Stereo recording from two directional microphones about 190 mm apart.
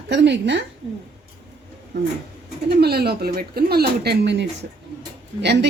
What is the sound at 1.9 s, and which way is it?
Speech, 65° right (ahead or behind).